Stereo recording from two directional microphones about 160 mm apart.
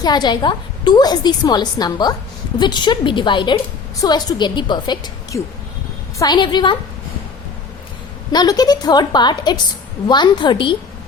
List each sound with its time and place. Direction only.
0.0 s a woman's voice: 25° left (ahead or behind)
8.3 s a woman's voice: 25° left (ahead or behind)